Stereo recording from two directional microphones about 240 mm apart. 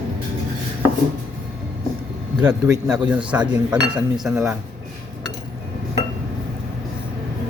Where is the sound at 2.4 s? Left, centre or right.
Centre.